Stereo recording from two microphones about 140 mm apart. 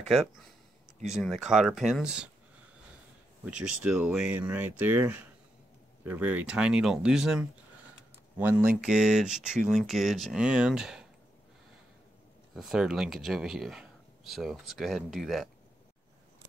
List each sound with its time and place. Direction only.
0.0 s speech: centre (ahead or behind)
3.4 s speech: 10° right (ahead or behind)
12.5 s speech: 5° right (ahead or behind)